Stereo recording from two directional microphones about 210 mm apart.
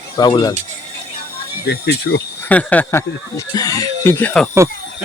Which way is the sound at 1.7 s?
50° left (ahead or behind).